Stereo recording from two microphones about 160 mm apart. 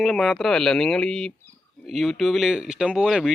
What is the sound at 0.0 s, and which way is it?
Speech, centre (ahead or behind).